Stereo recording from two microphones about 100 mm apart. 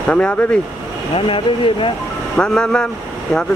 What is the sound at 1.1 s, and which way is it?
Speech, 60° left (ahead or behind).